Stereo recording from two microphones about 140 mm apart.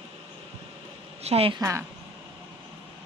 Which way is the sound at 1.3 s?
45° right (ahead or behind).